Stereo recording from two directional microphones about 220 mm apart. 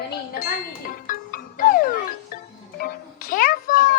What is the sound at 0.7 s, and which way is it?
Music, 40° left (ahead or behind).